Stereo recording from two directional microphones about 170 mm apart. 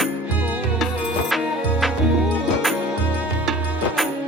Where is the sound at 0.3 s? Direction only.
10° right (ahead or behind).